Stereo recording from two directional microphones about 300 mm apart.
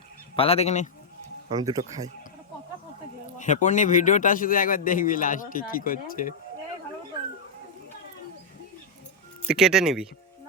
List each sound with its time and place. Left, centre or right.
0.3 s a man's voice: centre
1.5 s speech: centre
3.3 s a man's voice: left
9.5 s speech: centre